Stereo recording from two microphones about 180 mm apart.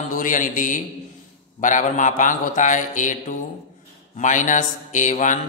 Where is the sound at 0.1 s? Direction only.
45° left (ahead or behind).